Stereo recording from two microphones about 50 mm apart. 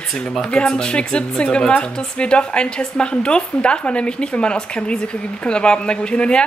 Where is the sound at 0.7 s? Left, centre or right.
Centre.